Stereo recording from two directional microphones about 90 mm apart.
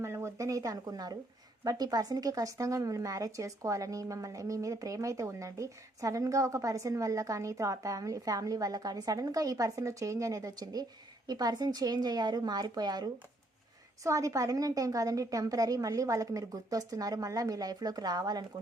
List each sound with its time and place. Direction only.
0.0 s a sound: 30° right (ahead or behind)
1.6 s a woman's voice: 45° right (ahead or behind)
14.0 s a woman's voice: 35° right (ahead or behind)